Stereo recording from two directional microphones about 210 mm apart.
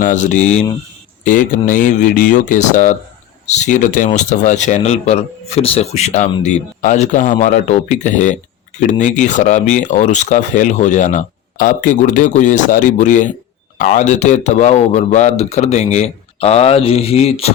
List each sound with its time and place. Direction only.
0.0 s speech: 35° left (ahead or behind)